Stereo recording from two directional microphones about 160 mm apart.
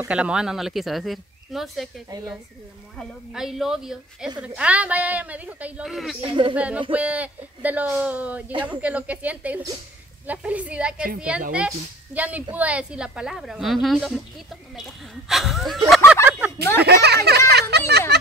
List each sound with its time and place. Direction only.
0.0 s a woman's voice: 5° right (ahead or behind)
2.0 s speech: 20° right (ahead or behind)
3.0 s a woman's voice: centre (ahead or behind)
6.2 s speech: 30° right (ahead or behind)
6.5 s speech: 10° right (ahead or behind)
8.5 s speech: 30° right (ahead or behind)
8.8 s a woman's voice: 10° right (ahead or behind)
16.3 s a sound: 10° right (ahead or behind)
16.8 s a sound: 90° right